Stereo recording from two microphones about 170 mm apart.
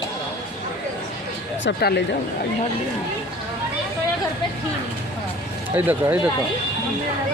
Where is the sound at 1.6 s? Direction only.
80° left.